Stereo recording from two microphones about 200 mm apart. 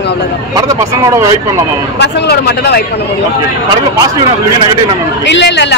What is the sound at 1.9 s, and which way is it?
Speech, 55° left (ahead or behind).